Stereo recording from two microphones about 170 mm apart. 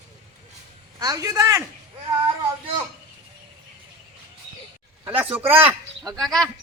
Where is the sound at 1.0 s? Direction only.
20° right (ahead or behind).